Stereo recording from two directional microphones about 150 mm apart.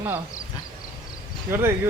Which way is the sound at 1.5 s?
15° right (ahead or behind).